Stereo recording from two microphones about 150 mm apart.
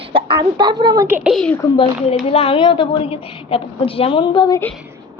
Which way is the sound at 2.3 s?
40° left (ahead or behind).